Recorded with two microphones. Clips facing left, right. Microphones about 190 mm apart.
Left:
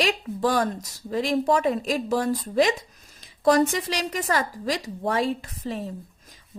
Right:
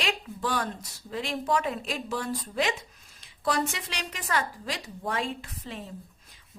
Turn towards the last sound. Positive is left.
turn(degrees=40)  # may be behind; listen again after turning